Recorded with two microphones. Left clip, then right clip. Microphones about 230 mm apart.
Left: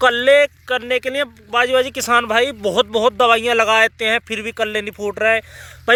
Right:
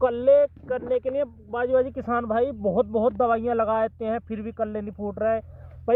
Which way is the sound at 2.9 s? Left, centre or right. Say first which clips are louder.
Left 7 dB; left.